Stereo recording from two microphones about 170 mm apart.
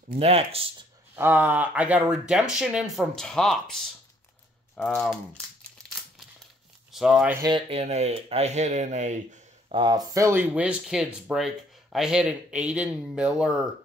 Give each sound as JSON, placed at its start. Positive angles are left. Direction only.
{"t": 0.2, "sound": "speech", "side_deg": -35}
{"t": 1.1, "sound": "speech", "side_deg": -10}
{"t": 6.9, "sound": "speech", "side_deg": -5}
{"t": 7.4, "sound": "speech", "side_deg": -30}
{"t": 9.8, "sound": "speech", "side_deg": -25}